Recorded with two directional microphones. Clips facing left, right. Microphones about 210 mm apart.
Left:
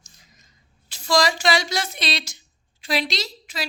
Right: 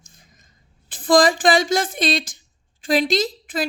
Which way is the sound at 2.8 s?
50° right (ahead or behind).